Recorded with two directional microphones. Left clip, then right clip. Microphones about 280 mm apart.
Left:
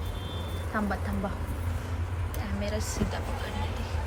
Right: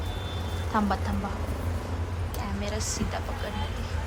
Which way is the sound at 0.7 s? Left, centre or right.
Centre.